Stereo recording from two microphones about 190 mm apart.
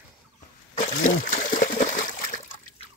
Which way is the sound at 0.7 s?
45° left (ahead or behind).